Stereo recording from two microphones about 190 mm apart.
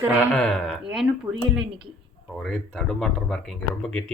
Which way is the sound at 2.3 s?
Centre (ahead or behind).